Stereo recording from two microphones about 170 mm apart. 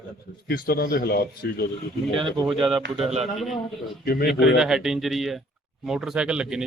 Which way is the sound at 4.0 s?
65° left (ahead or behind).